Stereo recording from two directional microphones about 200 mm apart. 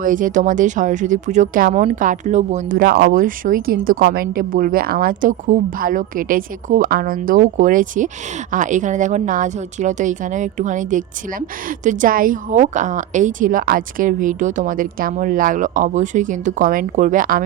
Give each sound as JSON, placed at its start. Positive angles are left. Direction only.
{"t": 0.0, "sound": "a woman's voice", "side_deg": -40}